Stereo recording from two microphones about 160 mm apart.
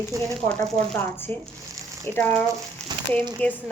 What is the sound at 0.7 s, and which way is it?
Speech, 10° left (ahead or behind).